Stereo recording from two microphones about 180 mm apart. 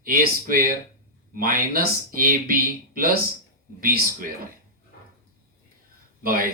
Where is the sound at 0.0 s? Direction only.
50° right (ahead or behind).